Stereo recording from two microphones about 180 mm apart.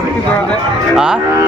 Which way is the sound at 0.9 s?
5° right (ahead or behind).